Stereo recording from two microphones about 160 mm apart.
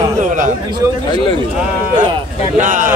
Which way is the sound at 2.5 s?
55° right (ahead or behind).